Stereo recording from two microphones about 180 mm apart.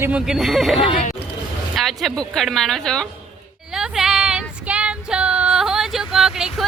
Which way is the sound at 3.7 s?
5° right (ahead or behind).